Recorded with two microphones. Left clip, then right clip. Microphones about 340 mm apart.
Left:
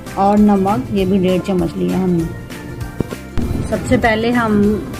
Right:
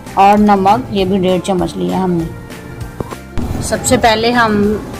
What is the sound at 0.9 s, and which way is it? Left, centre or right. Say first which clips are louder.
Speech: right 2 dB; right.